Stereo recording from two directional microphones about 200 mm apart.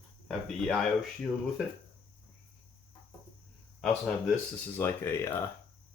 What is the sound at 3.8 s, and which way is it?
Speech, centre (ahead or behind).